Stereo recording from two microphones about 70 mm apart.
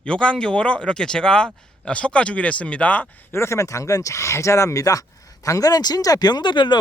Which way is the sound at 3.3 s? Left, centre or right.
Left.